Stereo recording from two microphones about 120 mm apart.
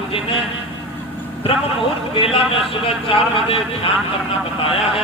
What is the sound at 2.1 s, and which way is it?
A man's voice, 50° left (ahead or behind).